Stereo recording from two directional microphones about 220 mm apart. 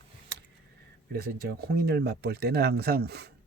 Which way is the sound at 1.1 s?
45° right (ahead or behind).